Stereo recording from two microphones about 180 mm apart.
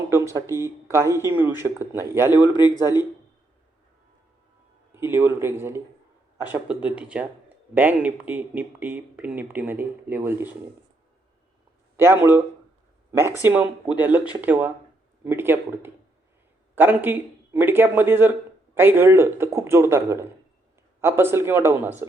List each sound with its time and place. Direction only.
0.1 s speech: 15° right (ahead or behind)
2.4 s speech: 25° left (ahead or behind)
4.9 s speech: 10° right (ahead or behind)
11.9 s speech: 15° right (ahead or behind)